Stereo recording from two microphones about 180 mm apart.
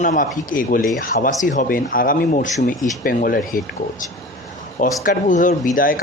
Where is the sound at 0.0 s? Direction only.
45° left (ahead or behind).